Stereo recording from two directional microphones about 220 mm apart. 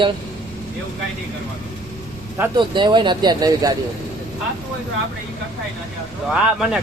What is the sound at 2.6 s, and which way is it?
Speech, 20° right (ahead or behind).